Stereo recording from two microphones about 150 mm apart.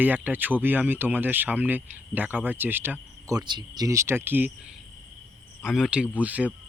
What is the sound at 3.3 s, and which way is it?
Speech, 30° right (ahead or behind).